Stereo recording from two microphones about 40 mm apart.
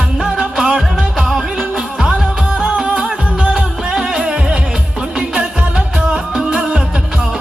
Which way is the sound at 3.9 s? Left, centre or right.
Centre.